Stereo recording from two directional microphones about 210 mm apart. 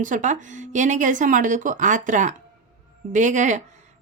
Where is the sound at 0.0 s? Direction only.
40° right (ahead or behind).